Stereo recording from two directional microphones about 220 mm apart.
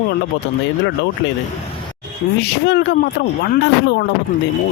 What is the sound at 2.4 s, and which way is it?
Speech, 50° left (ahead or behind).